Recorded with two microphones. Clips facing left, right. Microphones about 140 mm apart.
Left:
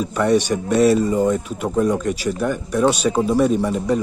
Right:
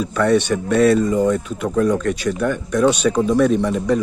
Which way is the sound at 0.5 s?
20° left (ahead or behind).